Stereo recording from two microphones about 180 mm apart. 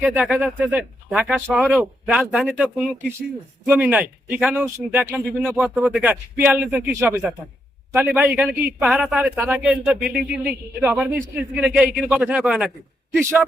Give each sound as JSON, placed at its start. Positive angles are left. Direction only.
{"t": 0.0, "sound": "speech", "side_deg": -10}